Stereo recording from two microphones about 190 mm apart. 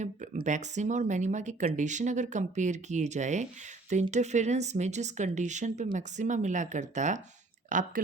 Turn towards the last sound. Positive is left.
turn(degrees=-40)  # may be behind; listen again after turning